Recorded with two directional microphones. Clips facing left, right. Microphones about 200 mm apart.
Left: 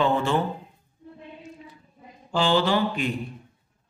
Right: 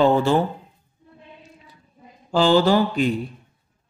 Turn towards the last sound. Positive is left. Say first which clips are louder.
# right 5 dB
turn(degrees=-40)  # may be behind; listen again after turning